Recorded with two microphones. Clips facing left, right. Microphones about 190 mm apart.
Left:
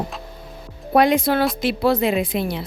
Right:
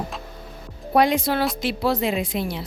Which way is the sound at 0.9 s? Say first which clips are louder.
Left 3 dB; 55° left (ahead or behind).